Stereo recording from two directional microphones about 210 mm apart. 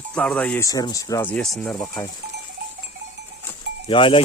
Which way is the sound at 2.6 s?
50° right (ahead or behind).